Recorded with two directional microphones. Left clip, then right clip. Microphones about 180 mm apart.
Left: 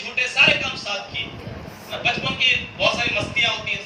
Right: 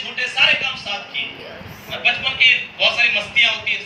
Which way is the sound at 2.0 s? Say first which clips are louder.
Right 5 dB; 20° left (ahead or behind).